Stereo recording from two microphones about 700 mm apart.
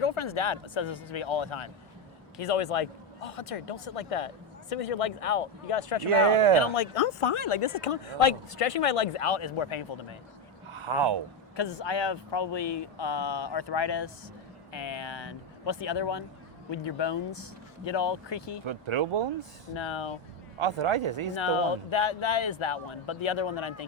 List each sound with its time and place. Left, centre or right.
0.0 s speech: left
6.1 s speech: right
6.7 s speech: left
10.8 s speech: right
11.5 s speech: left
18.6 s speech: right
19.7 s speech: left
20.6 s speech: right
21.4 s speech: left